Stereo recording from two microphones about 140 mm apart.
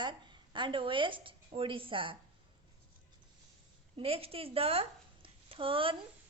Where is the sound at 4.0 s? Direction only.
45° right (ahead or behind).